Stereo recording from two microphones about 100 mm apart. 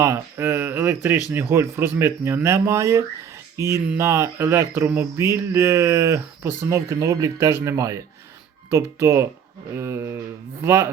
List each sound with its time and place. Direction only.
0.0 s speech: 25° right (ahead or behind)